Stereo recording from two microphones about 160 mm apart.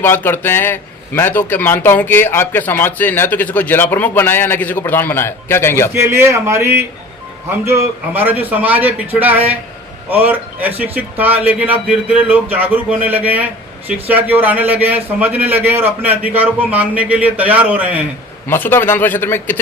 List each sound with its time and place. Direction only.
0.0 s a man's voice: 15° left (ahead or behind)
6.0 s a man's voice: 15° right (ahead or behind)
18.4 s a man's voice: 15° left (ahead or behind)